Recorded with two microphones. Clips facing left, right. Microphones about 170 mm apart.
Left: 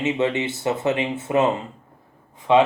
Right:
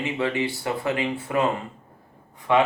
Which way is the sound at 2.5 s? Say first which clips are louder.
Left 4 dB; 20° left (ahead or behind).